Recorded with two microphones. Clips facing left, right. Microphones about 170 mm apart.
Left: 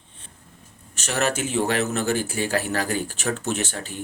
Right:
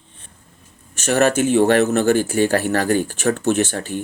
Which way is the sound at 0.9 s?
50° right (ahead or behind).